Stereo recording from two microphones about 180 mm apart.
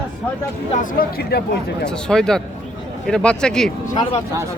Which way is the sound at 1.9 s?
5° left (ahead or behind).